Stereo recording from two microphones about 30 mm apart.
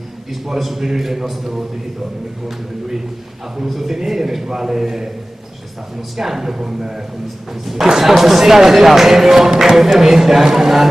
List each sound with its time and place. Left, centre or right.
0.3 s speech: centre
3.6 s speech: centre
6.1 s speech: centre
7.6 s speech: centre